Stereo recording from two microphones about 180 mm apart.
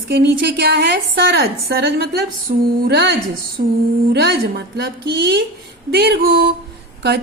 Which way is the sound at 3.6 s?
55° right (ahead or behind).